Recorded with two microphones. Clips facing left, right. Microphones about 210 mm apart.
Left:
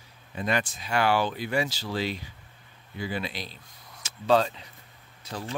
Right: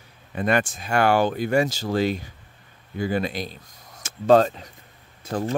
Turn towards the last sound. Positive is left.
turn(degrees=-50)  # may be behind; listen again after turning